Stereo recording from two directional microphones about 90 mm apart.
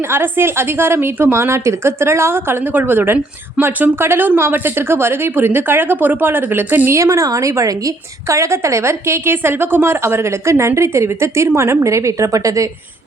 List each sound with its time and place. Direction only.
0.1 s speech: 25° right (ahead or behind)